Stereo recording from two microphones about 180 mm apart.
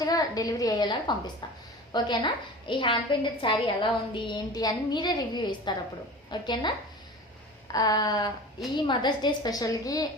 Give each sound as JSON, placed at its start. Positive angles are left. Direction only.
{"t": 0.0, "sound": "a woman's voice", "side_deg": 20}